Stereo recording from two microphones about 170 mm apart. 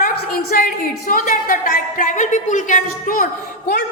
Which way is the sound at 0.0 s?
55° left (ahead or behind).